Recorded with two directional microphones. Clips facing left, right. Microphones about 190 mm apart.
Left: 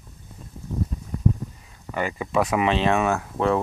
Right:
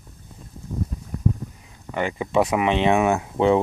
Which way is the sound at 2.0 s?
20° right (ahead or behind).